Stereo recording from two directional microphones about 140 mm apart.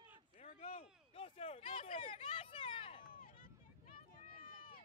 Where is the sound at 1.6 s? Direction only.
60° left (ahead or behind).